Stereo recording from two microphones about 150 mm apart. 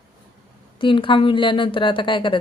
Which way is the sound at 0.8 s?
35° left (ahead or behind).